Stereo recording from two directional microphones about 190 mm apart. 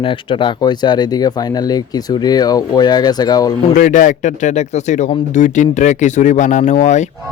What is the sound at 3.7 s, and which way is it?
Speech, 45° left (ahead or behind).